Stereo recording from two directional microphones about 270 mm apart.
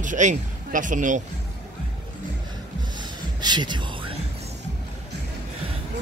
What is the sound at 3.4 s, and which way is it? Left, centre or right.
Speech, centre.